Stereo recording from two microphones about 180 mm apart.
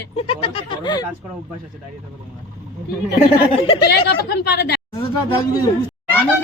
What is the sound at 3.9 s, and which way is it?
Speech, 65° left (ahead or behind).